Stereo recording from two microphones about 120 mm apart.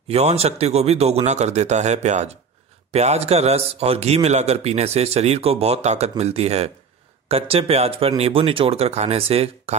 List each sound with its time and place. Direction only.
0.1 s speech: 60° right (ahead or behind)